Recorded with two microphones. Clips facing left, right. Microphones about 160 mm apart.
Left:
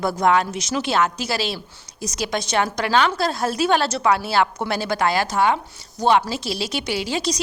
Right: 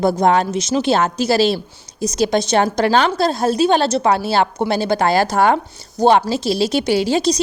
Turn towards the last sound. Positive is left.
turn(degrees=-35)  # may be behind; listen again after turning